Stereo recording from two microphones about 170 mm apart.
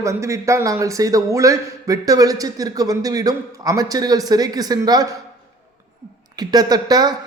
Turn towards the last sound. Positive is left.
turn(degrees=-25)  # may be behind; listen again after turning